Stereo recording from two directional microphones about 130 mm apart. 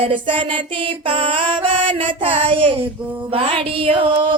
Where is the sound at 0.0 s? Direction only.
40° right (ahead or behind).